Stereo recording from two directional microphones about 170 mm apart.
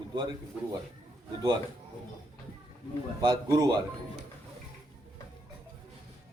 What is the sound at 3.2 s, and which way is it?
Speech, 25° right (ahead or behind).